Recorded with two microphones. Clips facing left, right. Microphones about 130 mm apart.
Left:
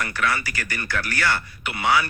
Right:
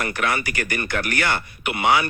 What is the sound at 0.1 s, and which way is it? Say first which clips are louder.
A man's voice: right 1 dB; 20° right (ahead or behind).